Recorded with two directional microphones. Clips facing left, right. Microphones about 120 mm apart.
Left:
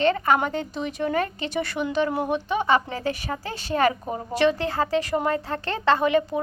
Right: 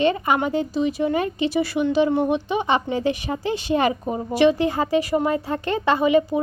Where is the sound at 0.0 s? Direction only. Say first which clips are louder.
Right 1 dB; 15° right (ahead or behind).